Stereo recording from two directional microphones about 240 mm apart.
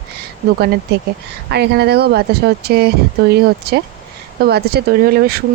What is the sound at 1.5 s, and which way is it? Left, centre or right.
Speech, right.